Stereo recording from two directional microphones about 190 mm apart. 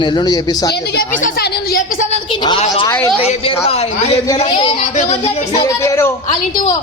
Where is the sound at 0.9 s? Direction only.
50° left (ahead or behind).